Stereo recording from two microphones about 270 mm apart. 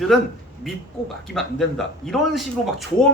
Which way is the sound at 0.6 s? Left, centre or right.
Centre.